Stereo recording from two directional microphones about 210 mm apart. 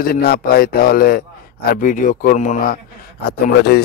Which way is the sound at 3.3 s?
50° left (ahead or behind).